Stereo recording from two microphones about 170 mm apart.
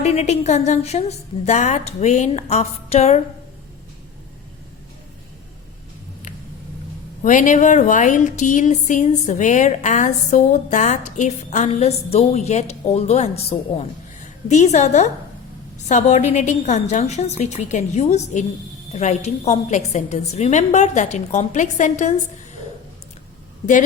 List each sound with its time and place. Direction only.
0.0 s a woman's voice: 40° left (ahead or behind)
7.2 s a woman's voice: 50° left (ahead or behind)